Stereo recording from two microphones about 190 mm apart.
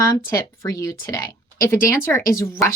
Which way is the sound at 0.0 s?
15° left (ahead or behind).